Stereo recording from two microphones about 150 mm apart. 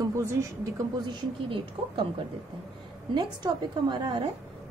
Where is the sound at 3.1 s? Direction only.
30° right (ahead or behind).